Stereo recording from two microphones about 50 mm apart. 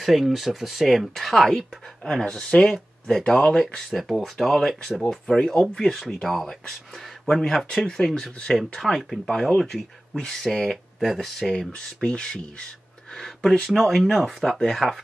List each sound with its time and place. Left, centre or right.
0.0 s speech: centre
2.0 s speech: centre
3.9 s speech: centre
11.7 s speech: centre
13.1 s speech: centre